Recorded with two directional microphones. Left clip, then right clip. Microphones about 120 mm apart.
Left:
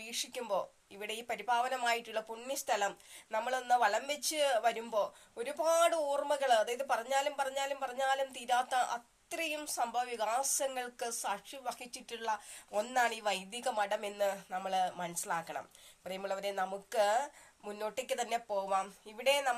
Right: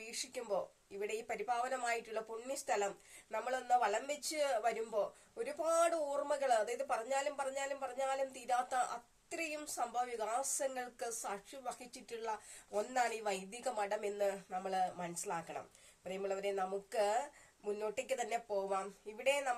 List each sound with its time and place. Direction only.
0.1 s speech: 35° right (ahead or behind)
0.4 s speech: 25° right (ahead or behind)
1.5 s speech: 35° right (ahead or behind)